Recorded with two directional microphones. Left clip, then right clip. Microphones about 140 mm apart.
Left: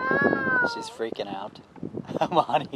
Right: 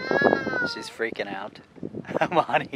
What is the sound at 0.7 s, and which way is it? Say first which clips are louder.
Speech: right 1 dB; 10° left (ahead or behind).